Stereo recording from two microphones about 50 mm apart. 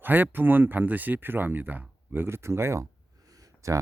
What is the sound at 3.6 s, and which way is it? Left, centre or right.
Speech, right.